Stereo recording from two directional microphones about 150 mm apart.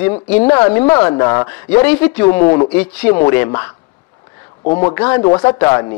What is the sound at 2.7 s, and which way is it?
Speech, 10° left (ahead or behind).